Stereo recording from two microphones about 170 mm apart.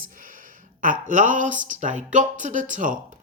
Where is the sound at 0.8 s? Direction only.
50° right (ahead or behind).